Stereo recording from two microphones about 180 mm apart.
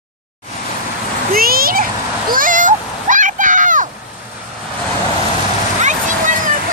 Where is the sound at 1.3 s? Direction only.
55° right (ahead or behind).